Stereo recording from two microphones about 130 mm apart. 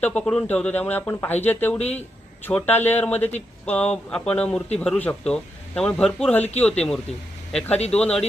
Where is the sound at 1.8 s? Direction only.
55° left (ahead or behind).